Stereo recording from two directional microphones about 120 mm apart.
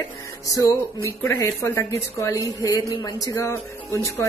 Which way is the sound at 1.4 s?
20° left (ahead or behind).